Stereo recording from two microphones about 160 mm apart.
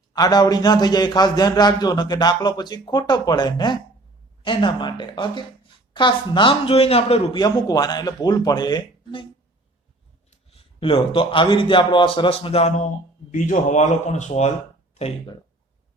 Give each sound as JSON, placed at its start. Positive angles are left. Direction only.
{"t": 0.1, "sound": "a man's voice", "side_deg": 25}
{"t": 7.3, "sound": "a man's voice", "side_deg": 25}
{"t": 10.5, "sound": "a man's voice", "side_deg": 35}